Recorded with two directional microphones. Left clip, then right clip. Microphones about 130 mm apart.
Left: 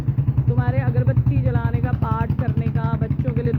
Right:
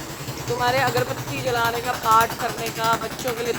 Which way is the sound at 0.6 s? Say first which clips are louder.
Right 12 dB; 10° right (ahead or behind).